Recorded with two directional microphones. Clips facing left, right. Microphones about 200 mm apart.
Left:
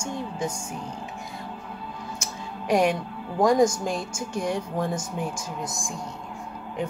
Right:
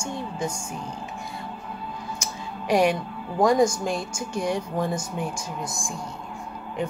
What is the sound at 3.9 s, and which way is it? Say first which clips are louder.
Speech: right 1 dB; centre (ahead or behind).